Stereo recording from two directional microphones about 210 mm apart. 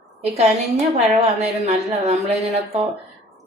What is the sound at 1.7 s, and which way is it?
Speech, 30° right (ahead or behind).